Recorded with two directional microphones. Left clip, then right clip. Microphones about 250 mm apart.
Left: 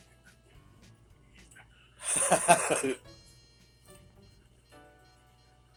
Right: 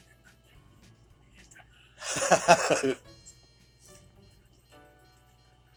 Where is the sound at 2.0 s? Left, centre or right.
Right.